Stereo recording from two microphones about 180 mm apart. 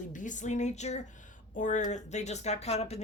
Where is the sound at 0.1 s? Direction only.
45° left (ahead or behind).